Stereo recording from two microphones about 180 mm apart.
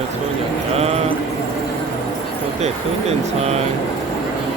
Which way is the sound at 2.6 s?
35° right (ahead or behind).